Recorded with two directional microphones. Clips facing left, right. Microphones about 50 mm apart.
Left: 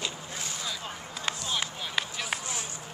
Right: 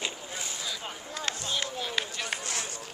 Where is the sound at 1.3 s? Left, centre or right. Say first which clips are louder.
Left 1 dB; centre.